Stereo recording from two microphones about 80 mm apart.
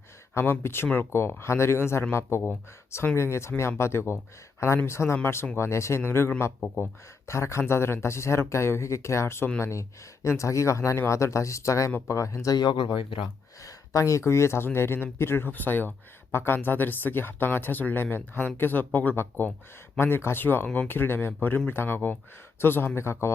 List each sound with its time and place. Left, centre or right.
0.3 s speech: left
12.5 s speech: left
13.2 s speech: left